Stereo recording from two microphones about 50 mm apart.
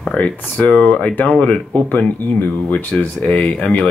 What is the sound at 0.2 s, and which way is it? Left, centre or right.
Speech, left.